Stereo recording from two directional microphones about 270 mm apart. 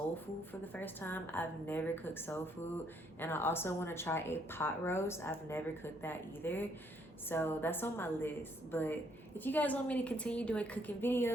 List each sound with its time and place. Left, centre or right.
0.6 s a woman's voice: centre